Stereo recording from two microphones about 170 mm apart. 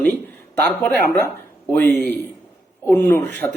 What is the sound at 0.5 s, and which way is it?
Speech, 10° left (ahead or behind).